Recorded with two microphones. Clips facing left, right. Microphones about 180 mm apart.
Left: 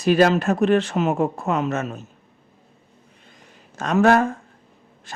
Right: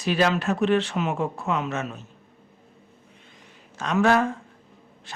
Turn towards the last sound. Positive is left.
turn(degrees=45)  # may be behind; listen again after turning